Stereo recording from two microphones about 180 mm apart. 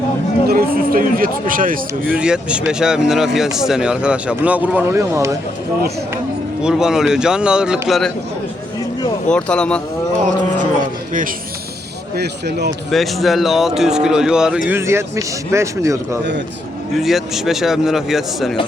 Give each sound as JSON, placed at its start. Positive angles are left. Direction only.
{"t": 0.4, "sound": "speech", "side_deg": -55}
{"t": 2.0, "sound": "speech", "side_deg": -5}
{"t": 6.6, "sound": "speech", "side_deg": -5}
{"t": 9.3, "sound": "speech", "side_deg": 5}
{"t": 12.1, "sound": "speech", "side_deg": -65}
{"t": 12.9, "sound": "a man's voice", "side_deg": 0}
{"t": 17.0, "sound": "speech", "side_deg": 0}